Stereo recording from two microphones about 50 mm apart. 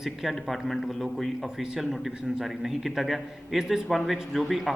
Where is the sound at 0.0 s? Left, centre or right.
Centre.